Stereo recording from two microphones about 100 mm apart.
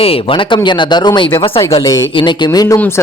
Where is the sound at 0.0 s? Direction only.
65° left (ahead or behind); by 1.3 s 50° left (ahead or behind).